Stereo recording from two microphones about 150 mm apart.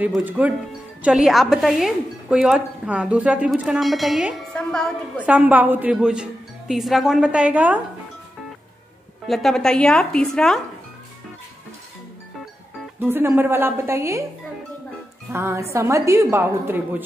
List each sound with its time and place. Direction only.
0.2 s a woman's voice: 10° right (ahead or behind); by 4.9 s 5° left (ahead or behind)
5.1 s a woman's voice: 10° right (ahead or behind)
9.3 s a woman's voice: centre (ahead or behind)
13.0 s a woman's voice: 15° right (ahead or behind)
15.3 s a woman's voice: 15° right (ahead or behind)